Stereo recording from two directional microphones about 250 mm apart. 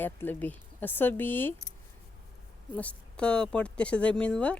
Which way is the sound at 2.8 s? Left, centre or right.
Centre.